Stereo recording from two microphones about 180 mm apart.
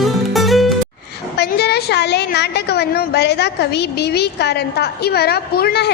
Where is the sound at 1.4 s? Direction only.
65° left (ahead or behind).